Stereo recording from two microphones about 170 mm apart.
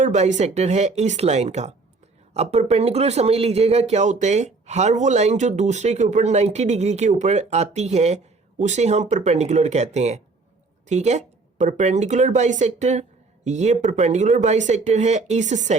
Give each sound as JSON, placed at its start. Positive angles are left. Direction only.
{"t": 0.0, "sound": "speech", "side_deg": -45}